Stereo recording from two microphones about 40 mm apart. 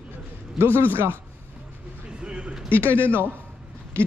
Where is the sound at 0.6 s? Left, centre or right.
Right.